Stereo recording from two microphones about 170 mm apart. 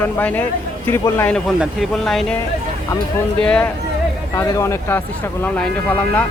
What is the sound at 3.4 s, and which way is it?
Speech, 5° left (ahead or behind).